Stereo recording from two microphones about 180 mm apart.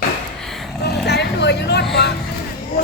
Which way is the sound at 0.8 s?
65° left (ahead or behind).